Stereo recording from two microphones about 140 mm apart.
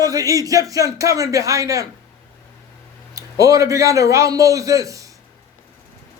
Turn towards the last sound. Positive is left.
turn(degrees=-25)  # may be behind; listen again after turning